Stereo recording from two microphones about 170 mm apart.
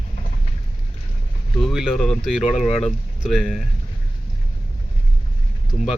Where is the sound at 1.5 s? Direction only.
Centre (ahead or behind).